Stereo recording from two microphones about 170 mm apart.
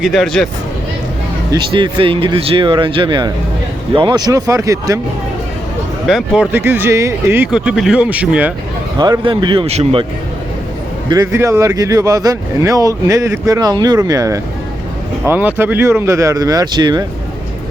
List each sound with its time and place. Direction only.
0.0 s speech: centre (ahead or behind)
1.7 s speech: 30° right (ahead or behind)
6.1 s speech: 5° right (ahead or behind)
9.0 s speech: 25° right (ahead or behind)
11.1 s speech: 20° right (ahead or behind)